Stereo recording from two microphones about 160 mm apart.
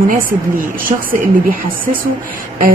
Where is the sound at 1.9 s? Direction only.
55° right (ahead or behind).